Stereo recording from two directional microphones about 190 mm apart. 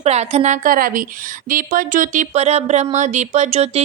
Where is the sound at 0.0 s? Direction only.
35° right (ahead or behind).